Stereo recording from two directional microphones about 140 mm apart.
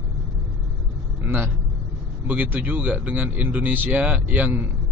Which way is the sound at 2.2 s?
10° right (ahead or behind).